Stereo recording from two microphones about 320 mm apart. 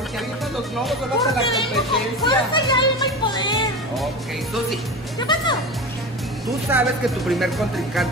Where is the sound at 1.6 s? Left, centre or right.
Centre.